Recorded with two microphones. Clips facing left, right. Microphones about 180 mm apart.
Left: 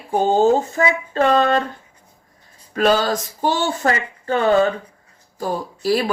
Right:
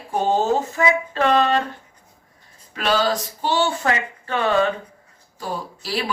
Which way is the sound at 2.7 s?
45° left (ahead or behind).